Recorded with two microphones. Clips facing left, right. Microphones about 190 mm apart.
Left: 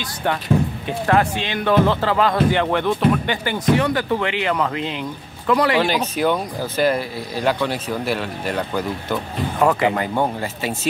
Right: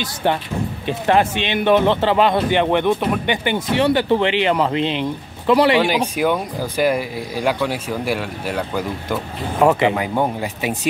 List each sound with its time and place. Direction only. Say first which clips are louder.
0.8 s speech: right 5 dB; 20° right (ahead or behind)
5.9 s speech: right 1 dB; 10° right (ahead or behind)
9.7 s speech: right 3 dB; 20° right (ahead or behind)
9.9 s speech: right 1 dB; 10° right (ahead or behind)